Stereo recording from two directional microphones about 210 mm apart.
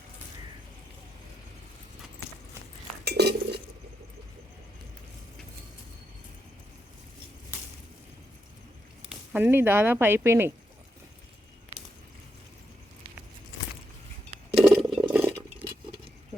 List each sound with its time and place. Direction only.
3.0 s cutlery: 50° right (ahead or behind)
9.0 s speech: 10° right (ahead or behind)
14.5 s a sound: centre (ahead or behind)